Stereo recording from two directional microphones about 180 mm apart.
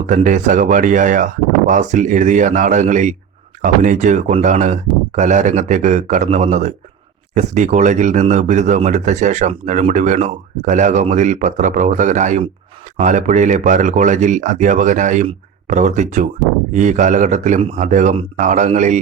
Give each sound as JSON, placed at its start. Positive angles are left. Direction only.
{"t": 0.0, "sound": "speech", "side_deg": -45}